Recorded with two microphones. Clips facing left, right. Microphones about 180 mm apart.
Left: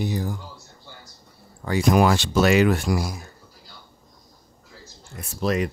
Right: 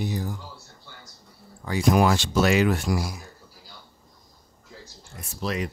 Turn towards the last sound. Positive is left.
turn(degrees=50)  # may be behind; listen again after turning